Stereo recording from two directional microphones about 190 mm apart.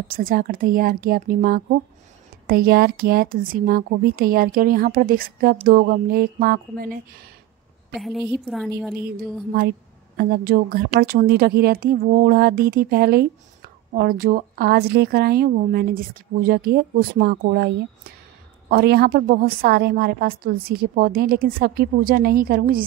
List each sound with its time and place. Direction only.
0.1 s speech: 50° right (ahead or behind)
7.9 s a woman's voice: centre (ahead or behind)
10.1 s speech: 50° right (ahead or behind)